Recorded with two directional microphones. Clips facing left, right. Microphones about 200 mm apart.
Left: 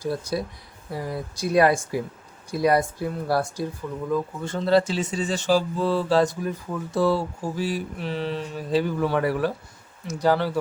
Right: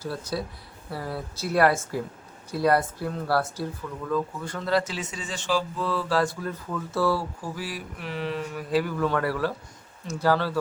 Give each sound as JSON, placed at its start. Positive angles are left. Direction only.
{"t": 0.0, "sound": "speech", "side_deg": 15}